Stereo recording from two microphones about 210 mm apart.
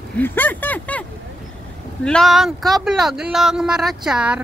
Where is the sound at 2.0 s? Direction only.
Centre (ahead or behind).